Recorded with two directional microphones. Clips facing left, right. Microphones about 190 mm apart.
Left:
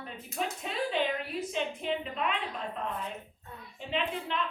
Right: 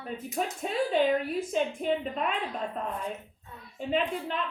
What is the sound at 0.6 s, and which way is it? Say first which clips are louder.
A woman's voice: right 7 dB; 45° right (ahead or behind).